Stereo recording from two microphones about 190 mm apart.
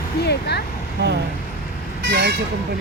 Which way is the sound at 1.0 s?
65° right (ahead or behind).